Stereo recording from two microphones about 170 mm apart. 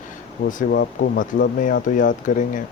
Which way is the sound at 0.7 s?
65° left (ahead or behind).